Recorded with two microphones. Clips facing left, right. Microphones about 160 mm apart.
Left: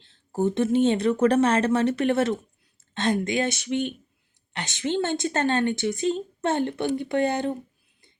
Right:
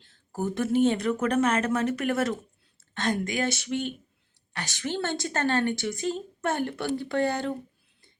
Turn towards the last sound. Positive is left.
turn(degrees=20)  # may be behind; listen again after turning